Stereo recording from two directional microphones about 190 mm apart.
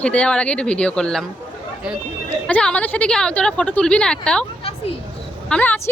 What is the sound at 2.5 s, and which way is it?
A woman's voice, 5° left (ahead or behind).